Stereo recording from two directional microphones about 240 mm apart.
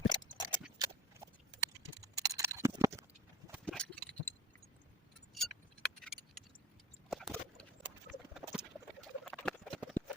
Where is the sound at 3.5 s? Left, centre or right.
Centre.